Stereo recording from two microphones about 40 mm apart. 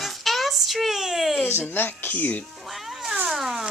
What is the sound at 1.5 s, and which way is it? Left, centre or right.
Speech, left.